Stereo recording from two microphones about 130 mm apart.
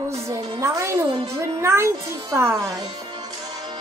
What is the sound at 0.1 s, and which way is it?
Music, 20° right (ahead or behind).